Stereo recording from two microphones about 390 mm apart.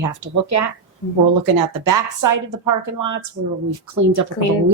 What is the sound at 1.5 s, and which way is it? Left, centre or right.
Speech, right.